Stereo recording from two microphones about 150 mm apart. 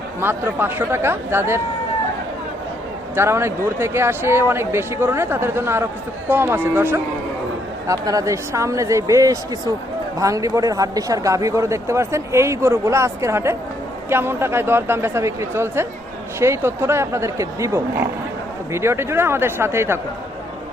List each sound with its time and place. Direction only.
0.2 s speech: 15° right (ahead or behind)
3.2 s speech: 15° right (ahead or behind)